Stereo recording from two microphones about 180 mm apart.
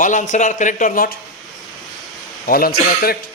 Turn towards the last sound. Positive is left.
turn(degrees=55)  # may be behind; listen again after turning